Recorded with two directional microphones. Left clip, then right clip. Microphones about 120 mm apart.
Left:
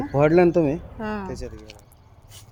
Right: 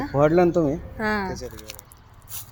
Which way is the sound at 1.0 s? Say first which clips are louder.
Right 8 dB; 35° right (ahead or behind).